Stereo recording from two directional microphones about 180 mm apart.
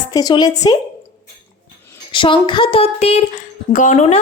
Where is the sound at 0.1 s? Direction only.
20° left (ahead or behind).